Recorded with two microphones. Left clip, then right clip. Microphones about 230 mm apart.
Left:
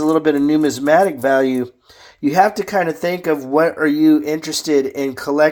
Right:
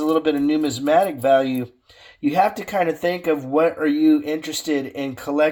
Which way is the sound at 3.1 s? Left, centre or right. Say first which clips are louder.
Left 3 dB; left.